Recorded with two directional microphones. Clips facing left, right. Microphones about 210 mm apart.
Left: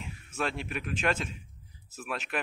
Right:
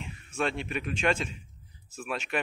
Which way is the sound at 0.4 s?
Centre (ahead or behind).